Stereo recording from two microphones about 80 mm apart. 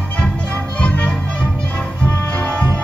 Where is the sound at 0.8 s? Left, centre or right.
Centre.